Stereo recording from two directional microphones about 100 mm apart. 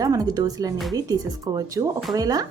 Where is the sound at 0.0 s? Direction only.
35° right (ahead or behind).